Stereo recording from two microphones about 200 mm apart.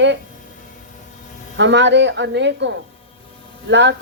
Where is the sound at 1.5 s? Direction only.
65° right (ahead or behind).